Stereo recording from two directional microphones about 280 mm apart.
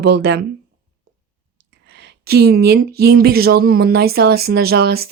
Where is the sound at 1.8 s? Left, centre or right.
Right.